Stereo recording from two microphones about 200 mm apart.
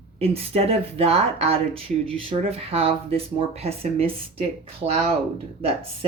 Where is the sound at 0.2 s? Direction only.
30° right (ahead or behind).